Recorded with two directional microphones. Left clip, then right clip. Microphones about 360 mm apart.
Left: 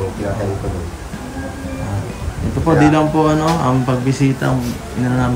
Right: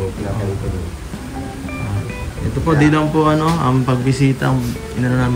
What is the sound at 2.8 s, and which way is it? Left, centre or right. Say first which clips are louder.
Speech: left 1 dB; centre.